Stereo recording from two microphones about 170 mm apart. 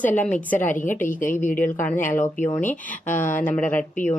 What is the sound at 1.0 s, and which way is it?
Speech, 50° left (ahead or behind).